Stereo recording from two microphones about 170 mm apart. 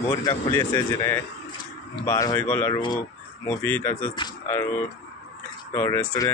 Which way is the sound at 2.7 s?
25° left (ahead or behind).